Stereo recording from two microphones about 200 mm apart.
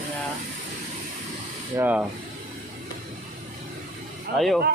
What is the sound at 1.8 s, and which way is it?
Speech, 5° right (ahead or behind).